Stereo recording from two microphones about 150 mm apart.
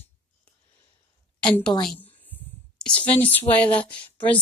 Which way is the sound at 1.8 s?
5° left (ahead or behind).